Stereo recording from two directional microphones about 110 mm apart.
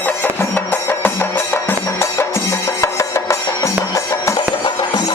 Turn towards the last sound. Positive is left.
turn(degrees=25)  # may be behind; listen again after turning